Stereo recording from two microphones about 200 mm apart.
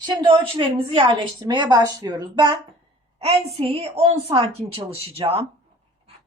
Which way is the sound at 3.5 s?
30° right (ahead or behind).